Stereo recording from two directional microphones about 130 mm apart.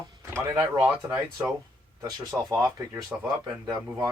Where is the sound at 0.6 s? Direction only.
20° right (ahead or behind).